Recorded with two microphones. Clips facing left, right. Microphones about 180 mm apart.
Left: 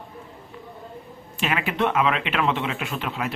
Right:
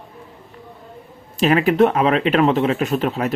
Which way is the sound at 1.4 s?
40° right (ahead or behind).